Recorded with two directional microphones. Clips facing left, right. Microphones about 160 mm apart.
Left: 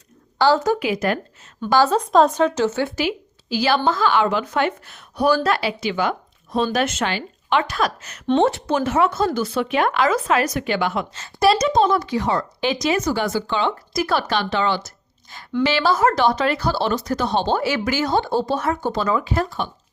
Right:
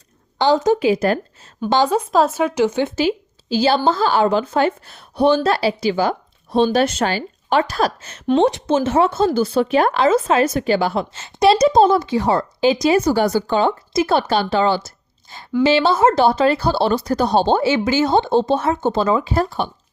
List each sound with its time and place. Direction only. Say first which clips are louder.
0.3 s speech: right 2 dB; 20° right (ahead or behind)
1.6 s speech: right 1 dB; 15° right (ahead or behind); by 8.2 s 30° right (ahead or behind)
8.4 s speech: right 3 dB; 20° right (ahead or behind); by 13.7 s 40° right (ahead or behind)
13.9 s a woman's voice: right 4 dB; 25° right (ahead or behind)